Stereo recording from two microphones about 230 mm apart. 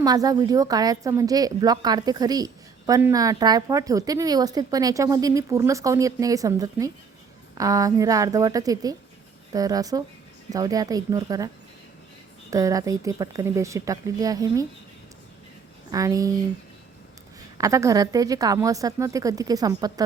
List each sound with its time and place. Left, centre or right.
0.0 s a woman's voice: centre
15.9 s a woman's voice: centre
17.6 s a woman's voice: centre